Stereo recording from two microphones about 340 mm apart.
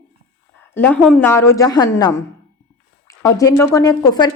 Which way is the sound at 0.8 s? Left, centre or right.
Centre.